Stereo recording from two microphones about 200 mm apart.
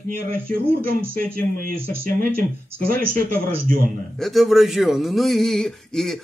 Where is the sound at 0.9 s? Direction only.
50° right (ahead or behind).